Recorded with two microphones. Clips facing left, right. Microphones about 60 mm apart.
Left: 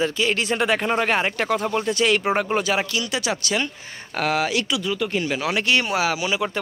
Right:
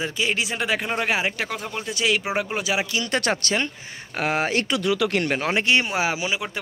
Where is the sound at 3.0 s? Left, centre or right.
Right.